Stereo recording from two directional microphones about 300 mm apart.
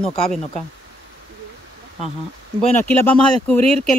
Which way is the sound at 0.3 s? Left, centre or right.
Centre.